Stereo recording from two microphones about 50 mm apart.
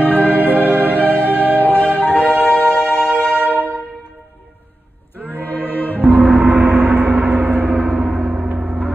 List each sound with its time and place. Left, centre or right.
0.0 s music: left
5.3 s music: left
6.0 s gong: right
7.9 s gong: right